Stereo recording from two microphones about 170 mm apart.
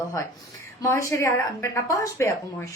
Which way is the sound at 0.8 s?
15° left (ahead or behind).